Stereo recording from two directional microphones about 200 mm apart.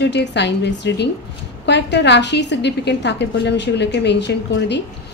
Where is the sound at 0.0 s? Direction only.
60° left (ahead or behind).